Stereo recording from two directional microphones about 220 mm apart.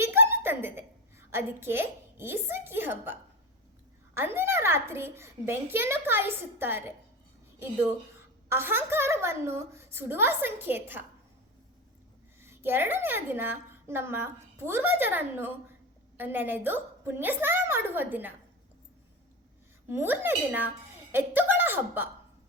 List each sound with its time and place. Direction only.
0.0 s a sound: 10° right (ahead or behind)
1.3 s a woman's voice: 10° right (ahead or behind)
8.4 s a woman's voice: 10° right (ahead or behind)
12.4 s a woman's voice: 10° right (ahead or behind)
19.9 s a woman's voice: 10° right (ahead or behind)